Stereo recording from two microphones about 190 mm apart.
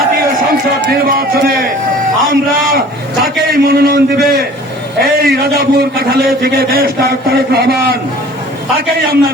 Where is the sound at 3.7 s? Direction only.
55° right (ahead or behind).